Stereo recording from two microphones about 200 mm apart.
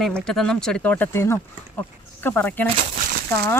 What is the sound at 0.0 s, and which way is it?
Speech, centre (ahead or behind).